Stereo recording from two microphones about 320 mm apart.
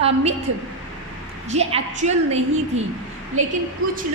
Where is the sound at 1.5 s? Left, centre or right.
Right.